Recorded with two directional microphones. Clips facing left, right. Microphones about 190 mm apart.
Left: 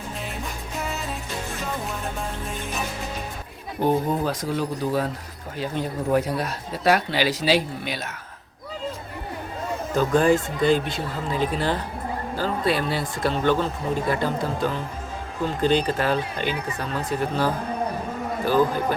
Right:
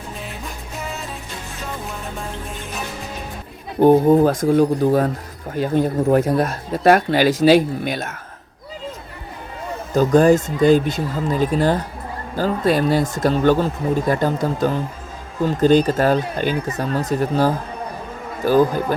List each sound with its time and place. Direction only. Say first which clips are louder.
3.8 s speech: right 10 dB; 50° right (ahead or behind)
9.9 s speech: right 6 dB; 40° right (ahead or behind)